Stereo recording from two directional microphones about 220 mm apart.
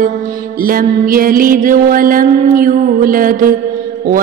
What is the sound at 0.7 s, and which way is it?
Mantra, 40° right (ahead or behind).